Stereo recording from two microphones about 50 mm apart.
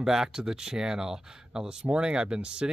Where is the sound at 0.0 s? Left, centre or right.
Centre.